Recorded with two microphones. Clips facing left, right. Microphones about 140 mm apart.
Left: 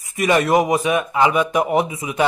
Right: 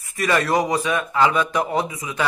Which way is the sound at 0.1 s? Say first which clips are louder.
Left 4 dB; 20° left (ahead or behind).